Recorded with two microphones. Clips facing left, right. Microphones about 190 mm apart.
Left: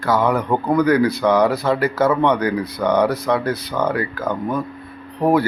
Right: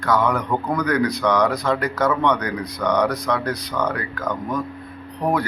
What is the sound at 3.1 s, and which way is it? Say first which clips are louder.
Speech: left 3 dB; 5° left (ahead or behind).